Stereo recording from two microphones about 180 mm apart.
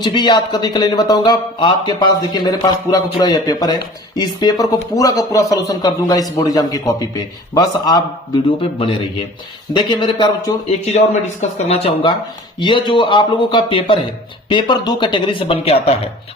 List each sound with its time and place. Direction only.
0.0 s speech: 25° left (ahead or behind)
10.9 s speech: 35° left (ahead or behind)